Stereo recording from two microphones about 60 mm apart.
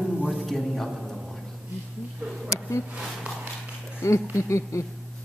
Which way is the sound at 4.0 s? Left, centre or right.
Left.